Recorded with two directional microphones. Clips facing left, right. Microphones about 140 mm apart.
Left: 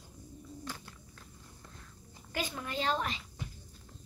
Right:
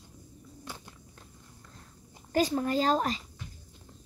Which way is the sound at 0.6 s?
15° right (ahead or behind).